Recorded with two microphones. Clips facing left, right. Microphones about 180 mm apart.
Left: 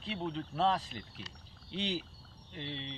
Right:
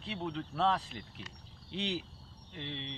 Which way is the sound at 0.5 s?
10° left (ahead or behind).